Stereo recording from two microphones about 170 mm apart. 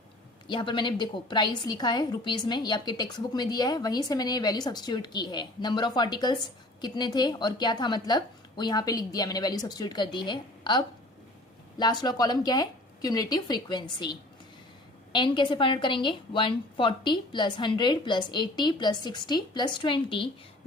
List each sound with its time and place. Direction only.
0.4 s a woman's voice: 30° left (ahead or behind)